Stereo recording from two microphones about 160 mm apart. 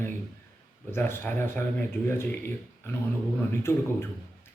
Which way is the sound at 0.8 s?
15° left (ahead or behind).